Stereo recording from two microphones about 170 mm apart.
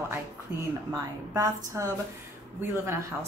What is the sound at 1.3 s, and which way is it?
Speech, 15° right (ahead or behind).